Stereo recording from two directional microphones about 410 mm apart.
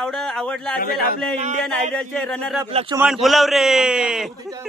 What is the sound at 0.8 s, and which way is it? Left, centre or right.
Speech, left.